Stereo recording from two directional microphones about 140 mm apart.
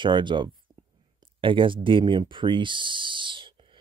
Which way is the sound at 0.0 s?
35° right (ahead or behind).